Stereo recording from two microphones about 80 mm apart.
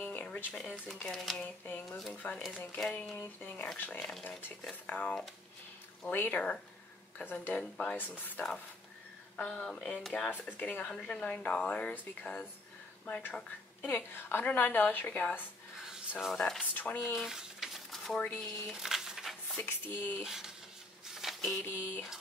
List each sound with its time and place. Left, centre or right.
0.0 s a sound: centre
0.8 s speech: centre
1.4 s a woman's voice: left; by 10.3 s centre
10.3 s a woman's voice: centre
15.9 s a sound: centre
16.3 s speech: centre
16.7 s a woman's voice: left
17.2 s dishes: centre
18.4 s a sound: centre
19.6 s a woman's voice: left
20.2 s speech: centre
21.1 s a sound: centre
21.6 s a woman's voice: left